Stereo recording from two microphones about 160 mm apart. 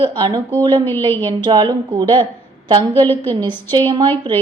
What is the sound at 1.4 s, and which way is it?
Speech, 30° right (ahead or behind).